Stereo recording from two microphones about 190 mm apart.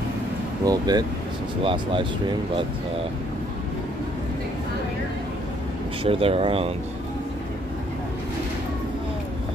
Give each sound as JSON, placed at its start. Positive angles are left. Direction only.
{"t": 0.7, "sound": "speech", "side_deg": -20}
{"t": 6.0, "sound": "speech", "side_deg": -30}